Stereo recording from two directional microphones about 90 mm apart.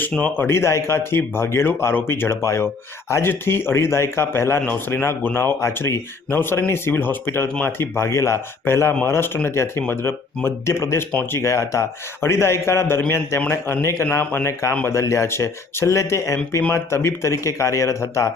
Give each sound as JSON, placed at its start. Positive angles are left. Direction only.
{"t": 0.0, "sound": "speech", "side_deg": 20}
{"t": 0.4, "sound": "speech", "side_deg": 30}